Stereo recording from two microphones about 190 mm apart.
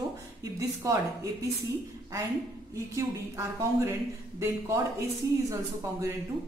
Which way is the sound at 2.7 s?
15° right (ahead or behind).